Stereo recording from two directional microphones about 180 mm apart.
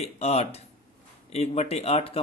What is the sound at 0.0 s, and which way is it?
Speech, 35° left (ahead or behind).